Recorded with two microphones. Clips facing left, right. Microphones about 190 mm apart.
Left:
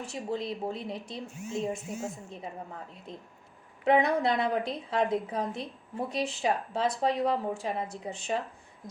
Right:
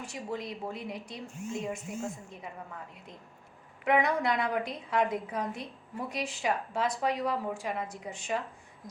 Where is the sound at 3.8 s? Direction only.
30° left (ahead or behind).